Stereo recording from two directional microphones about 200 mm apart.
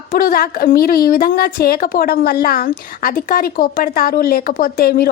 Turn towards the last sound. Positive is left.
turn(degrees=50)  # may be behind; listen again after turning